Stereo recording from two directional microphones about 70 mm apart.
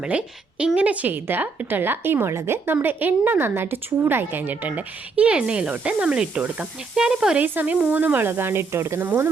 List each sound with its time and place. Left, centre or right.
0.0 s a woman's voice: centre; by 2.7 s right
2.8 s a woman's voice: right
6.9 s speech: centre
7.3 s a woman's voice: right